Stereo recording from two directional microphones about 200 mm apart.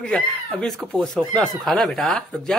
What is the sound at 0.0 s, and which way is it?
Speech, 5° left (ahead or behind).